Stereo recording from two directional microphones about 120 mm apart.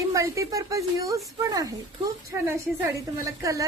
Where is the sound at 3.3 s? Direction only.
25° right (ahead or behind).